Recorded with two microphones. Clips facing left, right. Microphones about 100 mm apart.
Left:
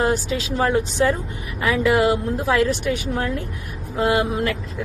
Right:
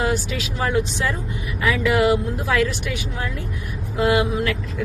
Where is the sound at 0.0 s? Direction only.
35° left (ahead or behind).